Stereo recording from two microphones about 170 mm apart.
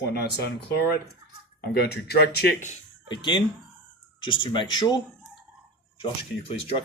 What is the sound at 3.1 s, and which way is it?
Speech, 25° left (ahead or behind).